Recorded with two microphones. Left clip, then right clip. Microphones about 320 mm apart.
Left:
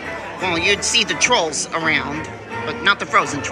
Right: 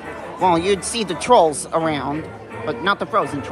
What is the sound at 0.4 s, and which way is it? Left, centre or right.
Speech, centre.